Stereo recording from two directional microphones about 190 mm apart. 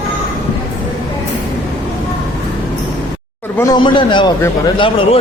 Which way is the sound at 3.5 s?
20° left (ahead or behind).